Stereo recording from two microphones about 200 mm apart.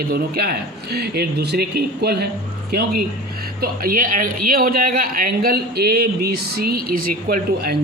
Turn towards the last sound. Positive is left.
turn(degrees=-50)  # may be behind; listen again after turning